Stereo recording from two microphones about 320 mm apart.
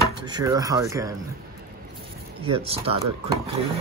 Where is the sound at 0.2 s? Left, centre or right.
Centre.